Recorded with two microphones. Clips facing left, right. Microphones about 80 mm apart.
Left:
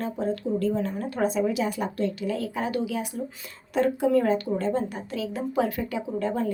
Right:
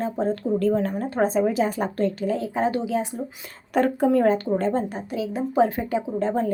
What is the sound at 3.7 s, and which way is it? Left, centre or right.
A woman's voice, right.